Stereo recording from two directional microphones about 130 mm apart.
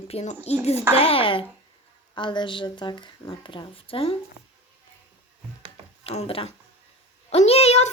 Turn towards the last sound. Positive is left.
turn(degrees=55)  # may be behind; listen again after turning